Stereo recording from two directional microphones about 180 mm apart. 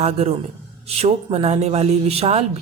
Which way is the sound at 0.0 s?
35° right (ahead or behind).